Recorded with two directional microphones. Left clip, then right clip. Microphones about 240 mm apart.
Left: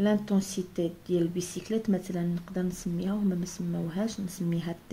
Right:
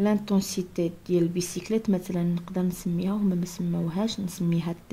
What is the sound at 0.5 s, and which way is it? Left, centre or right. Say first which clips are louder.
Speech: right 3 dB; right.